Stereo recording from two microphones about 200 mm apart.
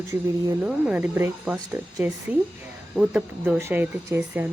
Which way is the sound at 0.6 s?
5° right (ahead or behind).